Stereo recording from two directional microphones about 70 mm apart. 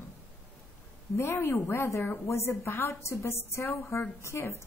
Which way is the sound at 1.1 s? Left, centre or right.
Left.